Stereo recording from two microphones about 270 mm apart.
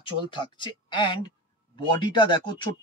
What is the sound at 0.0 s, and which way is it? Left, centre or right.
Speech, centre.